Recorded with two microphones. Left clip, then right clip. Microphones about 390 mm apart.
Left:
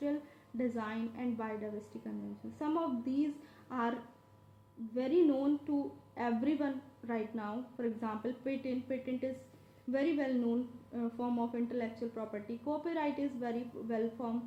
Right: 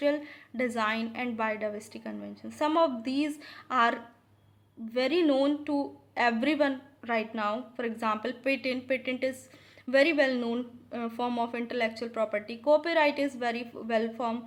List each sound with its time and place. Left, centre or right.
0.0 s a woman's voice: centre
4.9 s a woman's voice: centre